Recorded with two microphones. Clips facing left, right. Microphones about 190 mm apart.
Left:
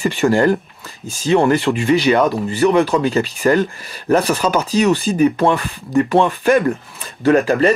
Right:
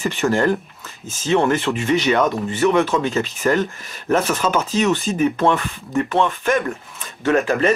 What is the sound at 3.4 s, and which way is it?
Speech, 5° left (ahead or behind).